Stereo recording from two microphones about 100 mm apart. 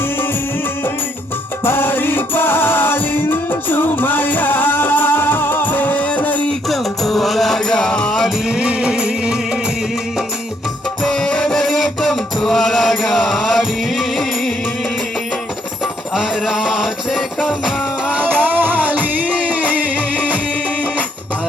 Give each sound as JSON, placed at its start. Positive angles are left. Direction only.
{"t": 1.6, "sound": "music", "side_deg": 20}
{"t": 6.7, "sound": "music", "side_deg": 0}
{"t": 11.0, "sound": "music", "side_deg": 5}
{"t": 16.1, "sound": "music", "side_deg": 0}
{"t": 18.1, "sound": "music", "side_deg": -15}